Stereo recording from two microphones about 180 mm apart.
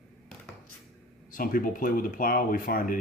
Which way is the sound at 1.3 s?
50° left (ahead or behind).